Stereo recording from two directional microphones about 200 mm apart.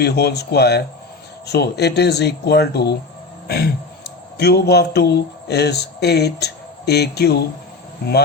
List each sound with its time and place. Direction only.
0.0 s speech: 55° left (ahead or behind)
3.4 s a sound: 55° left (ahead or behind)
4.4 s speech: 55° left (ahead or behind)